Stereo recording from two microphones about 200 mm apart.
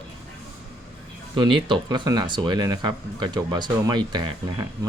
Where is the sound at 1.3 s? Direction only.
25° right (ahead or behind).